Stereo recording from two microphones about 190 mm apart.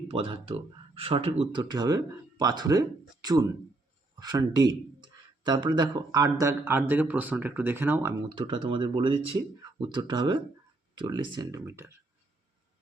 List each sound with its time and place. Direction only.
0.1 s speech: 30° right (ahead or behind); by 8.1 s 10° right (ahead or behind)
8.3 s speech: 25° right (ahead or behind)